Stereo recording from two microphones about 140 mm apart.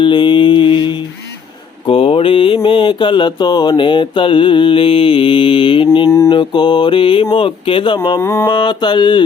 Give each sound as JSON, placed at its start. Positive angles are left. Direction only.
{"t": 0.0, "sound": "mantra", "side_deg": 35}
{"t": 8.2, "sound": "mantra", "side_deg": 15}
{"t": 8.4, "sound": "mantra", "side_deg": 35}